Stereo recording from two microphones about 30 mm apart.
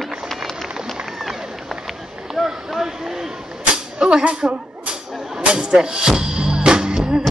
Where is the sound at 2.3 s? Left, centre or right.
Centre.